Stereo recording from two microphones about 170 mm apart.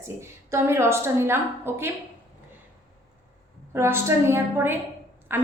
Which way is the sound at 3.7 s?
15° right (ahead or behind).